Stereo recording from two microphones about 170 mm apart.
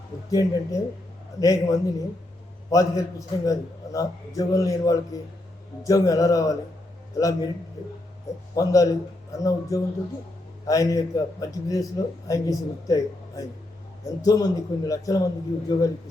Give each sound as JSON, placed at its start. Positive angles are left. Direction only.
{"t": 0.3, "sound": "a man's voice", "side_deg": 20}
{"t": 8.5, "sound": "a man's voice", "side_deg": 20}